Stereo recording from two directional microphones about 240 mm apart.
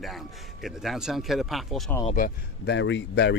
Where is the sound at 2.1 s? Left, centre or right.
Left.